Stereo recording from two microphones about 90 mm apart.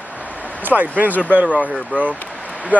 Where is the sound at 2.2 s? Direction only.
15° left (ahead or behind).